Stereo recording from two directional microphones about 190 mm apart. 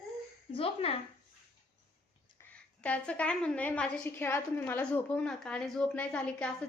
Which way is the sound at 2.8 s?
5° left (ahead or behind).